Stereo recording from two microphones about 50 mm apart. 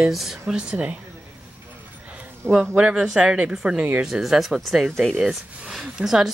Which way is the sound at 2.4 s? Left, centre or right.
Right.